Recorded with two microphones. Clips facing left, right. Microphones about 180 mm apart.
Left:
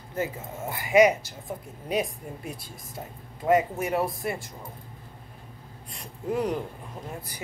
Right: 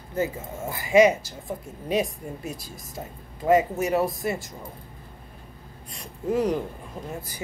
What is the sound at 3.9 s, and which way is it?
Speech, 90° right.